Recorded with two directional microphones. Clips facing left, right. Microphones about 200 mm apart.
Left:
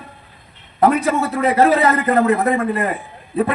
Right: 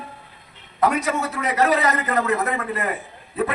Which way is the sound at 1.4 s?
30° left (ahead or behind).